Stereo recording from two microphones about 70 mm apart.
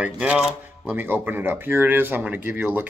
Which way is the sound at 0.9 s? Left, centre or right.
Right.